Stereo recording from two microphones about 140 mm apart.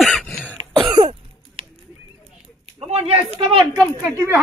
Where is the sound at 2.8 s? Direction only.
45° right (ahead or behind).